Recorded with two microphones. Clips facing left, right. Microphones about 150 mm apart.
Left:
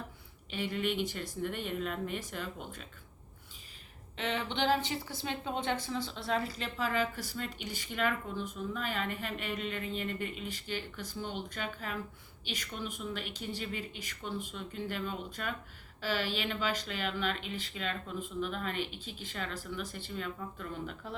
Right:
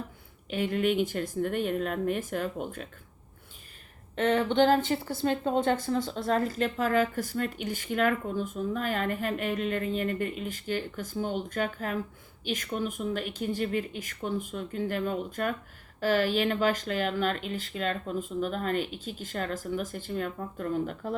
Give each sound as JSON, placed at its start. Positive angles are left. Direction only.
{"t": 0.5, "sound": "speech", "side_deg": -50}
{"t": 4.1, "sound": "speech", "side_deg": -50}